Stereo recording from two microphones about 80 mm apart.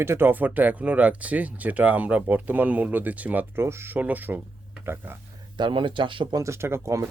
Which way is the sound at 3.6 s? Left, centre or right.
Right.